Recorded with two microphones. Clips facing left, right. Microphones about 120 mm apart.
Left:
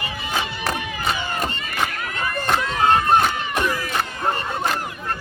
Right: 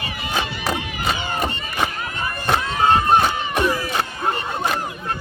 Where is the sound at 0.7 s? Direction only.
25° right (ahead or behind).